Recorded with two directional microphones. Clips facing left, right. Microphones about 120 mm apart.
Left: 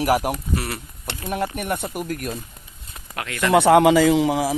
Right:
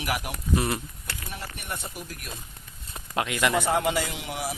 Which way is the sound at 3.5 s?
90° left.